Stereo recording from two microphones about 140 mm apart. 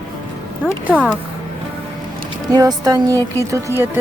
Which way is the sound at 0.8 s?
10° right (ahead or behind).